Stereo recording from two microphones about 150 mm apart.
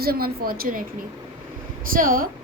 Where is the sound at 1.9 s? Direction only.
70° right (ahead or behind).